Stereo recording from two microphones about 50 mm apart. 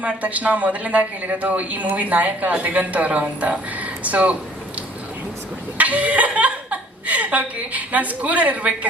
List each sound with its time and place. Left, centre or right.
0.0 s a man's voice: right
5.7 s speech: right